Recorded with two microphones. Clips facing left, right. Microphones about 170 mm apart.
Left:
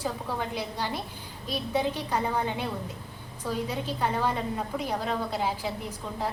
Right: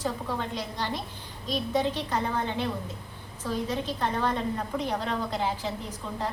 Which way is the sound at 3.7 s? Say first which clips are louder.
Even; 10° left (ahead or behind).